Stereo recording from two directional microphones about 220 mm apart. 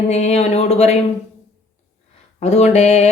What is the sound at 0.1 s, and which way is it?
Speech, 30° left (ahead or behind).